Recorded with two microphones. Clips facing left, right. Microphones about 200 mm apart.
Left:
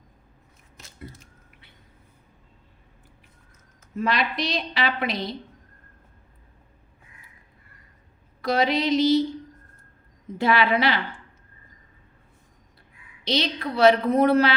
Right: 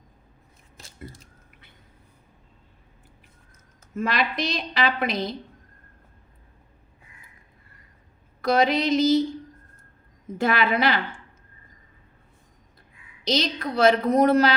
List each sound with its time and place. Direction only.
3.9 s a woman's voice: 50° right (ahead or behind)
8.4 s a woman's voice: 50° right (ahead or behind)
10.3 s a woman's voice: 45° right (ahead or behind)
13.2 s a woman's voice: 45° right (ahead or behind)